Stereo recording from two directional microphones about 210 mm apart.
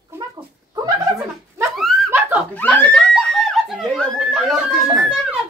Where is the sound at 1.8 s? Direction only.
Centre (ahead or behind).